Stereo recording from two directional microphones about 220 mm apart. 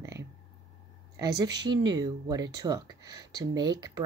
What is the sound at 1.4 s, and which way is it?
A woman's voice, 20° right (ahead or behind).